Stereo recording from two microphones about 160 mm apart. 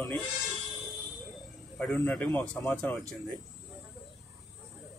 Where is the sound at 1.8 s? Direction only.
10° left (ahead or behind).